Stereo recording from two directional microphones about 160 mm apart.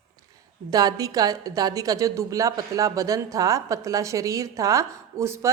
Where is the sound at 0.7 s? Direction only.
25° right (ahead or behind).